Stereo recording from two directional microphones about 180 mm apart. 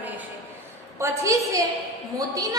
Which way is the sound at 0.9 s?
15° right (ahead or behind).